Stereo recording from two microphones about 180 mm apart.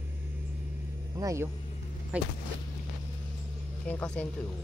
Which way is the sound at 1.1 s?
15° right (ahead or behind).